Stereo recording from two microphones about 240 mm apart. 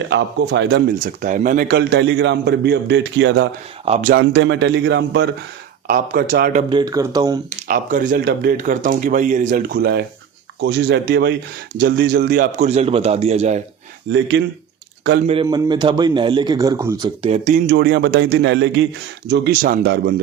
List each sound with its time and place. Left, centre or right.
0.1 s speech: right
3.8 s a man's voice: right
4.1 s speech: right
6.7 s a man's voice: centre
7.7 s speech: right
8.1 s a man's voice: right
14.1 s speech: right
15.4 s a man's voice: centre
17.2 s a man's voice: right
17.7 s speech: right
19.3 s speech: right